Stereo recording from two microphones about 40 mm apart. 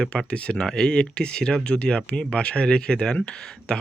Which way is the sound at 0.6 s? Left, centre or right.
Centre.